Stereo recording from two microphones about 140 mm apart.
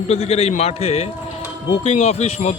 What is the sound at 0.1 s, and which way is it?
A man's voice, 45° left (ahead or behind).